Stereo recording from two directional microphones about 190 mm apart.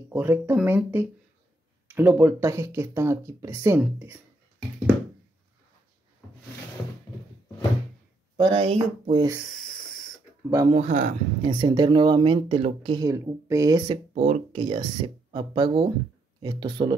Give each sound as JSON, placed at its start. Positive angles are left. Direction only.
{"t": 0.1, "sound": "speech", "side_deg": -10}
{"t": 8.4, "sound": "speech", "side_deg": -30}
{"t": 9.4, "sound": "a sound", "side_deg": 0}
{"t": 10.7, "sound": "speech", "side_deg": -35}
{"t": 11.5, "sound": "speech", "side_deg": -25}
{"t": 14.1, "sound": "speech", "side_deg": -35}